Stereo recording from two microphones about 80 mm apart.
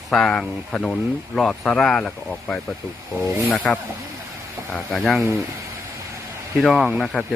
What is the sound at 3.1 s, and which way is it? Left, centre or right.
Speech, right.